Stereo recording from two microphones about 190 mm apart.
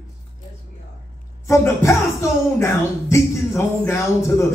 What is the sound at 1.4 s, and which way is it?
Speech, 15° left (ahead or behind).